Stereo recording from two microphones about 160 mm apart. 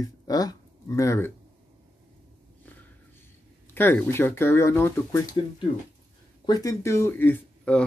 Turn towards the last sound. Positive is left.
turn(degrees=10)  # may be behind; listen again after turning